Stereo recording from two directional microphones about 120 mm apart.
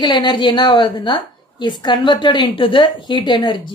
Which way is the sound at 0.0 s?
40° left (ahead or behind).